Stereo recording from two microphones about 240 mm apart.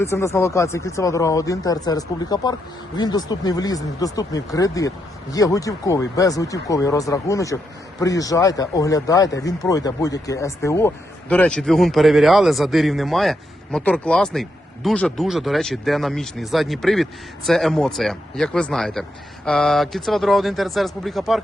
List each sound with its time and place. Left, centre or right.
0.0 s speech: centre